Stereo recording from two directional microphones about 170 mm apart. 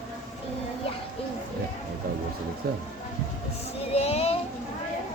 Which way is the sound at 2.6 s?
65° right (ahead or behind).